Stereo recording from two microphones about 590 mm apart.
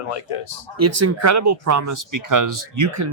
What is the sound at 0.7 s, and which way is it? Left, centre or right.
Speech, right.